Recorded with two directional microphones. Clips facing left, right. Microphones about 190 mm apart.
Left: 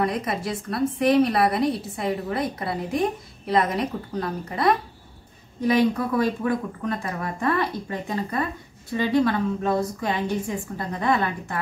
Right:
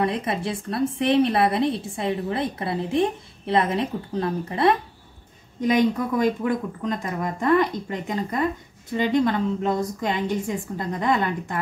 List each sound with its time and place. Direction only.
0.0 s a woman's voice: 25° right (ahead or behind)